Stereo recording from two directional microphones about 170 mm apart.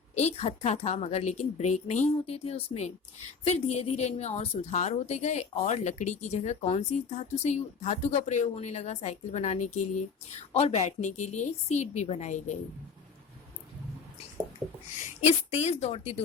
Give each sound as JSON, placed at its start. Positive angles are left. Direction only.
{"t": 0.1, "sound": "a woman's voice", "side_deg": 40}
{"t": 15.4, "sound": "a woman's voice", "side_deg": 40}